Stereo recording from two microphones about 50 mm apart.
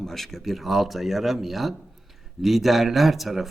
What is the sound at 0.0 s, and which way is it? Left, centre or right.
A man's voice, centre.